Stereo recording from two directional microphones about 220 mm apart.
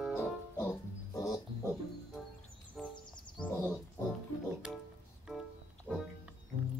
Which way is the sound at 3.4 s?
Centre (ahead or behind).